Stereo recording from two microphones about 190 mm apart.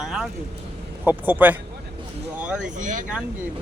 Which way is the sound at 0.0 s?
5° right (ahead or behind).